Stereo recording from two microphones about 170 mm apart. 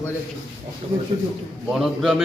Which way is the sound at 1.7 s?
Centre (ahead or behind).